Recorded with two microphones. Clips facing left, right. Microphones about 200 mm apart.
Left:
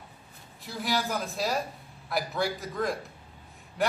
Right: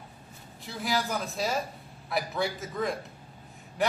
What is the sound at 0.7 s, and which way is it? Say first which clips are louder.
A man's voice: even; centre (ahead or behind).